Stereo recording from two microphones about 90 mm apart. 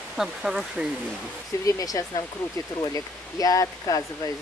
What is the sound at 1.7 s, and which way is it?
Speech, 40° left (ahead or behind).